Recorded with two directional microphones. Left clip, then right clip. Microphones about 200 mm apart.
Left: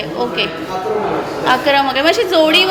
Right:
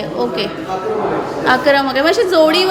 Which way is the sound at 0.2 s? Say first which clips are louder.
Left 1 dB; 25° right (ahead or behind).